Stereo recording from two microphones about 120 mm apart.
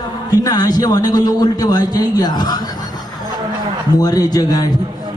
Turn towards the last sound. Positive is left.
turn(degrees=30)  # may be behind; listen again after turning